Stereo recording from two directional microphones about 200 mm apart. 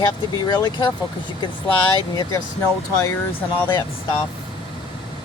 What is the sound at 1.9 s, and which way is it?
Speech, 20° left (ahead or behind).